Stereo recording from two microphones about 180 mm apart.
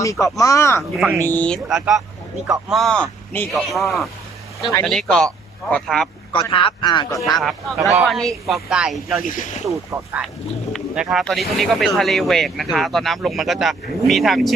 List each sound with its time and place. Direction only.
0.0 s speech: 20° left (ahead or behind)
0.8 s speech: centre (ahead or behind)
6.5 s speech: 30° left (ahead or behind)
7.3 s speech: centre (ahead or behind)
9.2 s speech: 45° left (ahead or behind)
9.9 s speech: 10° right (ahead or behind)